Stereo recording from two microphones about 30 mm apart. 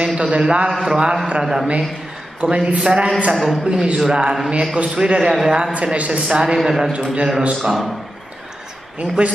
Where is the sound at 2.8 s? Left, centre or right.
Right.